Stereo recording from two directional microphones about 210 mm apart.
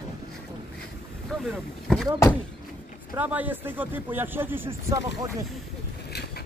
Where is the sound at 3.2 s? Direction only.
10° right (ahead or behind).